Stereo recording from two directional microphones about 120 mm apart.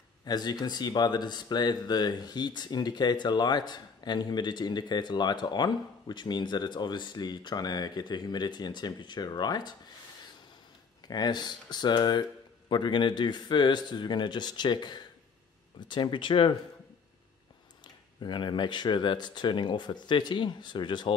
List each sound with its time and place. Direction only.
0.2 s speech: 35° left (ahead or behind)
11.1 s speech: 35° left (ahead or behind)
18.2 s speech: 40° left (ahead or behind)